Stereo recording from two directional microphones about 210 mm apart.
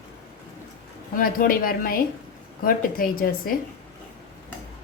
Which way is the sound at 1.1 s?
40° left (ahead or behind).